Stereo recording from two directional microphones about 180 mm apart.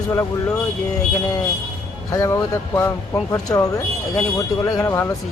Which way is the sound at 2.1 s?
15° left (ahead or behind).